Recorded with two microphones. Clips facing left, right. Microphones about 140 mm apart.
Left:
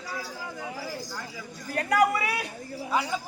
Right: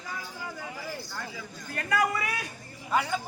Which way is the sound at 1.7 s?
70° left (ahead or behind).